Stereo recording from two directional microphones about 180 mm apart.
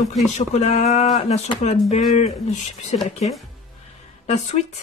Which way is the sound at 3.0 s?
35° left (ahead or behind).